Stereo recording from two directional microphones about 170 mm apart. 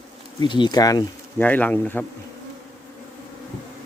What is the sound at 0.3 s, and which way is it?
Speech, 25° left (ahead or behind).